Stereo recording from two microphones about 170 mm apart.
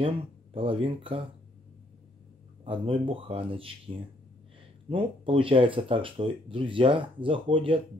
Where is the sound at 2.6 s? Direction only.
30° right (ahead or behind).